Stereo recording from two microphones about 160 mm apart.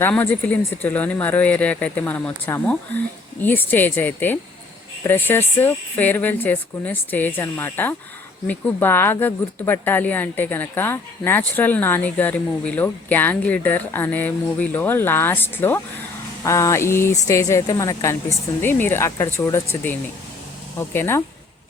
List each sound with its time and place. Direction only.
0.0 s speech: 10° left (ahead or behind)